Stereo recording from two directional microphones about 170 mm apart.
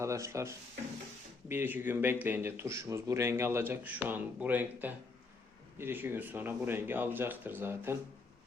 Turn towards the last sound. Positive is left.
turn(degrees=-10)  # may be behind; listen again after turning